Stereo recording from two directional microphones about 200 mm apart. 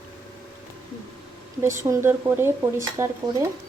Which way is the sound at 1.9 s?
10° right (ahead or behind).